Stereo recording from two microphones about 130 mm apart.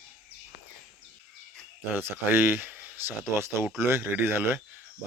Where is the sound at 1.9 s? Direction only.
15° right (ahead or behind).